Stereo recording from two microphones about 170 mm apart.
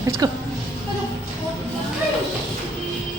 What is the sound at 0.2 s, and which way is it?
Speech, 20° right (ahead or behind).